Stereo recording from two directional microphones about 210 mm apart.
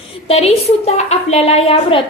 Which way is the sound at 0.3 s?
30° left (ahead or behind).